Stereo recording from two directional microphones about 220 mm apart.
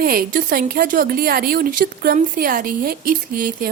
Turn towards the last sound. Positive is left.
turn(degrees=-40)  # may be behind; listen again after turning